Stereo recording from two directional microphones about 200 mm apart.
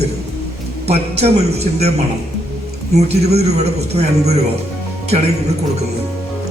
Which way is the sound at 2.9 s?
30° right (ahead or behind).